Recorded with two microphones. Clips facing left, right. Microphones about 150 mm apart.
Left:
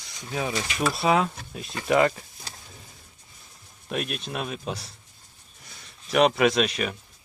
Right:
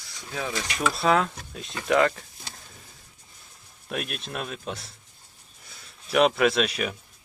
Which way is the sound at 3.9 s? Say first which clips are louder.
Left 2 dB; centre (ahead or behind).